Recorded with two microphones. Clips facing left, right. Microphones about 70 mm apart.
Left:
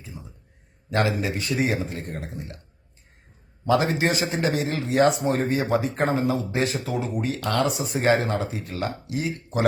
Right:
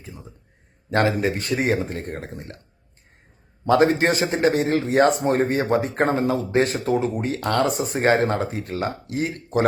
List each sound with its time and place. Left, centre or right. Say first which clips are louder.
0.9 s a man's voice: right 4 dB; right
3.7 s a man's voice: right 4 dB; right